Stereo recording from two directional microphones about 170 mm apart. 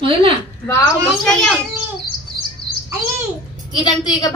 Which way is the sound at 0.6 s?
20° left (ahead or behind).